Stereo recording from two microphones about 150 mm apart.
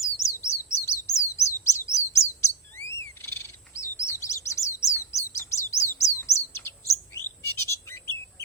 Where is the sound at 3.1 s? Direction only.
15° left (ahead or behind).